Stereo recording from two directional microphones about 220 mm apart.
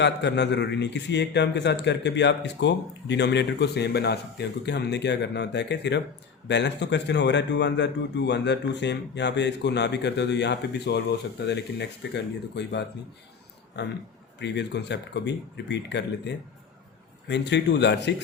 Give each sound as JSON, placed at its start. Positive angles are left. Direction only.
{"t": 0.0, "sound": "speech", "side_deg": 50}